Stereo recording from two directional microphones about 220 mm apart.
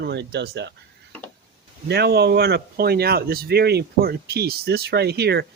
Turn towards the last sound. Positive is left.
turn(degrees=-50)  # may be behind; listen again after turning